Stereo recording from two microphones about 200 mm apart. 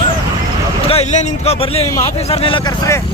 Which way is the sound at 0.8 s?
30° left (ahead or behind).